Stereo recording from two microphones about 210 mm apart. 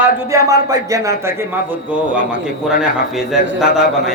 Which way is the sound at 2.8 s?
Centre (ahead or behind).